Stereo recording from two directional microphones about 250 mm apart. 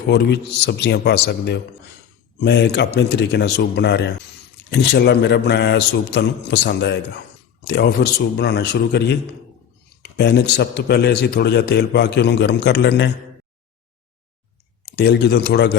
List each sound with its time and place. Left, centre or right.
0.1 s a man's voice: left
14.8 s a man's voice: left